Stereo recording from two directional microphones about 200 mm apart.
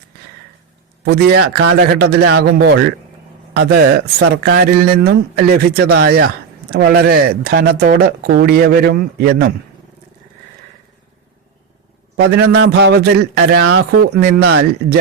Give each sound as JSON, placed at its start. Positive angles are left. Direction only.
{"t": 1.0, "sound": "a man's voice", "side_deg": -55}
{"t": 12.2, "sound": "speech", "side_deg": -55}